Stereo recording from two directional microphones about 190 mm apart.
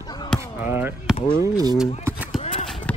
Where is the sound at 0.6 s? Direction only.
10° right (ahead or behind).